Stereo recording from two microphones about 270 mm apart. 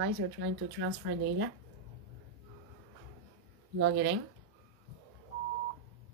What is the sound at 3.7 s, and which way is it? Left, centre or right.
Speech, right.